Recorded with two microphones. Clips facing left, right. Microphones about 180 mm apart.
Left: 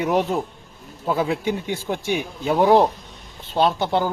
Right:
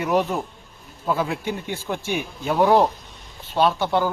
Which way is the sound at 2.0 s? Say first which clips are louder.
Left 3 dB; 15° left (ahead or behind).